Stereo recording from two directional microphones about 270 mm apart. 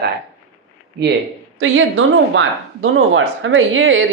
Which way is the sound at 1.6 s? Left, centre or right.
Right.